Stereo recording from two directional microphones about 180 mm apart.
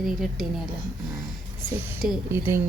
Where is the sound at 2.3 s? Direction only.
15° right (ahead or behind).